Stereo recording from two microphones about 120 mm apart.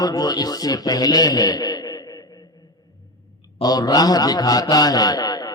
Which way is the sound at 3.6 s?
35° left (ahead or behind).